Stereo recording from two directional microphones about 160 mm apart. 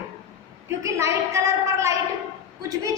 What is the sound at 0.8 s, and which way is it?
A woman's voice, 20° right (ahead or behind).